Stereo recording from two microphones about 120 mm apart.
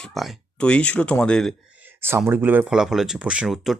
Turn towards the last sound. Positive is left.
turn(degrees=-5)  # may be behind; listen again after turning